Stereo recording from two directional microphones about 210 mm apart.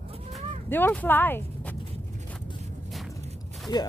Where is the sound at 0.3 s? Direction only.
10° left (ahead or behind).